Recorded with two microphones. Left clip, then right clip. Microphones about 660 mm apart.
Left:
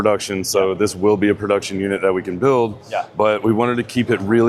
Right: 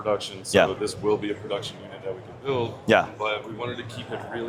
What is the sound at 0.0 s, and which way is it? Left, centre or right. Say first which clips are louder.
Speech: left 9 dB; left.